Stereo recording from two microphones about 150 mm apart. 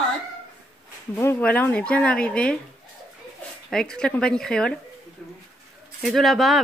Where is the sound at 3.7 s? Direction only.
5° left (ahead or behind).